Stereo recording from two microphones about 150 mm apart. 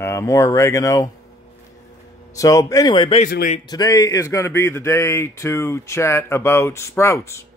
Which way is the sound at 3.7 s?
25° left (ahead or behind).